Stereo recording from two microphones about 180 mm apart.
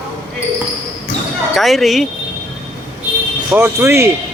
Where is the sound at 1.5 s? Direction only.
Centre (ahead or behind).